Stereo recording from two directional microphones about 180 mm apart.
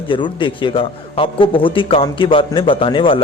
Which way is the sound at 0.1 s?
25° left (ahead or behind).